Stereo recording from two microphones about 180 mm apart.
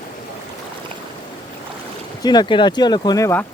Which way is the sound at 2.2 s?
25° left (ahead or behind).